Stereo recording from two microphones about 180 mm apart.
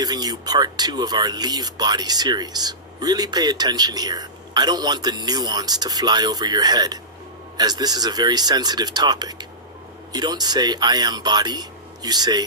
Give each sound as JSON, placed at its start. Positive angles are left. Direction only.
{"t": 0.0, "sound": "speech", "side_deg": -20}